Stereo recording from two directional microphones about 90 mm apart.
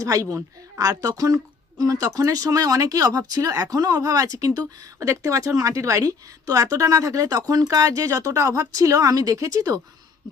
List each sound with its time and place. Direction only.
0.0 s speech: 40° right (ahead or behind)